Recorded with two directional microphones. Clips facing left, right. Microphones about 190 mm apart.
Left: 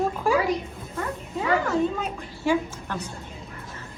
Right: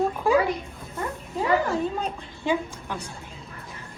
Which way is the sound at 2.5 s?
15° right (ahead or behind).